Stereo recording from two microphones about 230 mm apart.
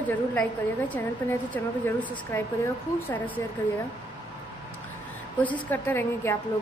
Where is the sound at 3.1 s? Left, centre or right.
Centre.